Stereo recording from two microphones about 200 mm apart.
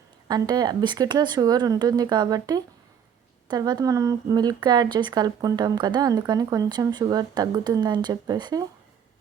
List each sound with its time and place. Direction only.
0.3 s a woman's voice: 20° right (ahead or behind)